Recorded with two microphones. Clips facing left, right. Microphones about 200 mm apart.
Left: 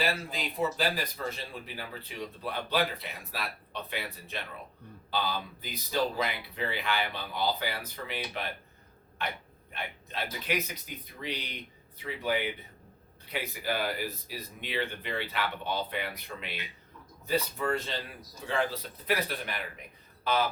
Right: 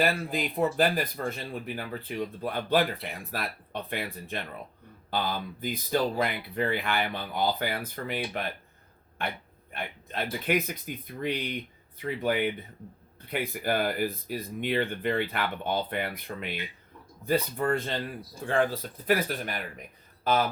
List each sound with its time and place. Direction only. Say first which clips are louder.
0.0 s speech: right 5 dB; 55° right (ahead or behind)
10.4 s speech: right 6 dB; 50° right (ahead or behind)